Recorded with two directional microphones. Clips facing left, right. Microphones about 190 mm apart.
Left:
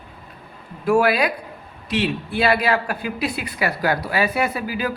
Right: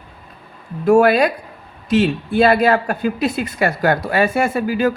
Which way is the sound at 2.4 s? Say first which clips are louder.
Right 6 dB; 45° right (ahead or behind).